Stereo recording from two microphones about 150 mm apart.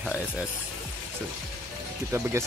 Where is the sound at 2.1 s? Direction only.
20° right (ahead or behind).